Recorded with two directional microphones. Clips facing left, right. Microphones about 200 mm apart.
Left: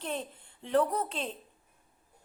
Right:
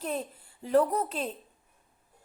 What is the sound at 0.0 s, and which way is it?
A woman's voice, 5° right (ahead or behind).